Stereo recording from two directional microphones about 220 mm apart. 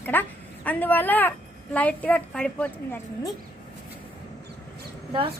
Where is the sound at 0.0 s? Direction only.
10° left (ahead or behind).